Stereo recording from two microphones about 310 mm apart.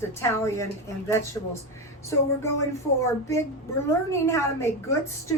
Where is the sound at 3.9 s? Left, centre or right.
Centre.